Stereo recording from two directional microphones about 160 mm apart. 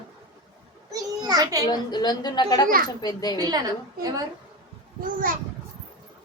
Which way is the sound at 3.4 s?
25° right (ahead or behind).